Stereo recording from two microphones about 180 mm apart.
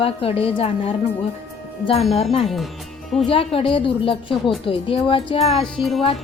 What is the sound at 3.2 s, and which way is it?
Speech, 30° left (ahead or behind).